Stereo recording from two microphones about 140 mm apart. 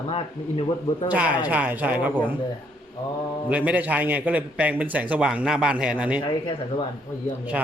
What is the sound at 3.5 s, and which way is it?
A man's voice, 10° right (ahead or behind).